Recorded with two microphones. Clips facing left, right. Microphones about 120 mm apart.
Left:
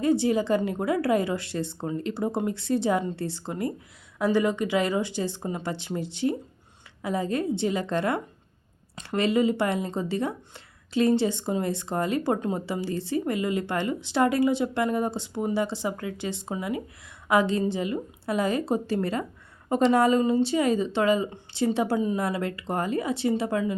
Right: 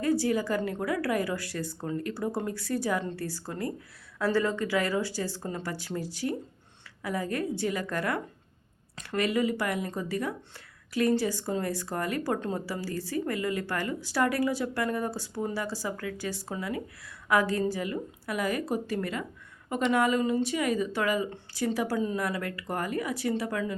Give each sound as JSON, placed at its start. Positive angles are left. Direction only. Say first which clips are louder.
{"t": 0.0, "sound": "speech", "louder": "left 4 dB", "side_deg": 20}